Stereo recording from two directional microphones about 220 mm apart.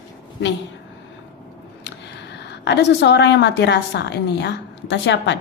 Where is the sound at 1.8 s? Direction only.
50° left (ahead or behind).